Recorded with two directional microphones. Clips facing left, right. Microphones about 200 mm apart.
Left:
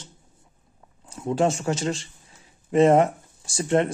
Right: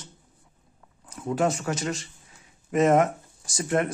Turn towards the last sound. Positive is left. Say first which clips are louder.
# left 4 dB
turn(degrees=25)  # may be behind; listen again after turning